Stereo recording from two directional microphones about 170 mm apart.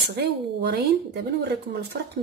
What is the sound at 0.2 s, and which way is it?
Speech, 75° right (ahead or behind).